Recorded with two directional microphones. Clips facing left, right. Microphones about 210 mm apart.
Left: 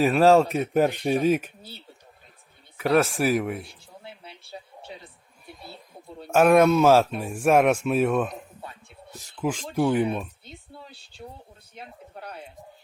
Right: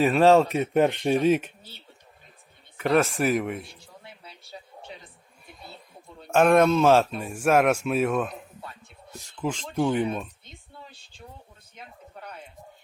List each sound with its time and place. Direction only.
0.0 s speech: centre (ahead or behind)
2.7 s speech: centre (ahead or behind)
6.2 s speech: 5° left (ahead or behind)
11.8 s a sound: 35° left (ahead or behind)